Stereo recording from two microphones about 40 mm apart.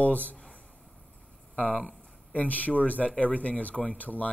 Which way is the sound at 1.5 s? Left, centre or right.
Left.